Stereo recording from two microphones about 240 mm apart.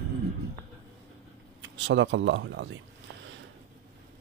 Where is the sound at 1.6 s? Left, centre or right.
Right.